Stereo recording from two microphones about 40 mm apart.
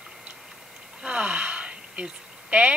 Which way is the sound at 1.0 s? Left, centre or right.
Right.